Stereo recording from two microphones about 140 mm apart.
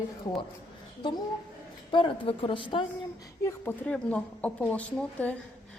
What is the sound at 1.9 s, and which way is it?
Speech, 35° left (ahead or behind).